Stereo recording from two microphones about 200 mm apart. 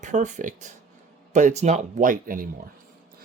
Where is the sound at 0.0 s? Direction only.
40° right (ahead or behind).